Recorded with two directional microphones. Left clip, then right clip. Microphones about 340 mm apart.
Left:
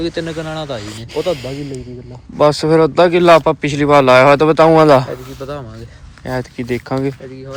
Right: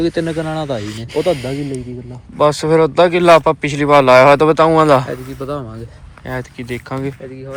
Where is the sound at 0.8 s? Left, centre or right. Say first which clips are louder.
Right 2 dB; centre.